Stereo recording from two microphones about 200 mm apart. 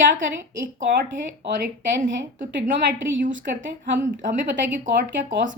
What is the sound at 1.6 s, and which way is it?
Speech, 40° right (ahead or behind).